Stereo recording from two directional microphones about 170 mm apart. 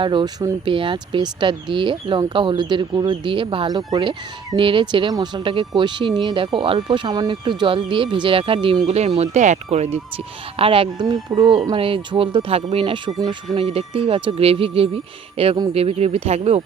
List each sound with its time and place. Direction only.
0.0 s speech: 25° right (ahead or behind)